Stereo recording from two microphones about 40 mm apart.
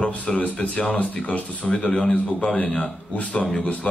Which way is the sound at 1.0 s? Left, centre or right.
Left.